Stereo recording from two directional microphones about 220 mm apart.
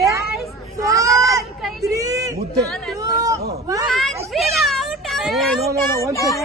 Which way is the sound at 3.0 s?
15° right (ahead or behind).